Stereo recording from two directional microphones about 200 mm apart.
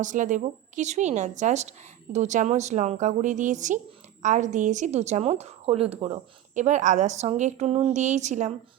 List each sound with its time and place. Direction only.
0.0 s a woman's voice: 40° right (ahead or behind)